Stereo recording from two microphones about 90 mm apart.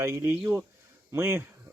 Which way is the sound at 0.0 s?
30° right (ahead or behind).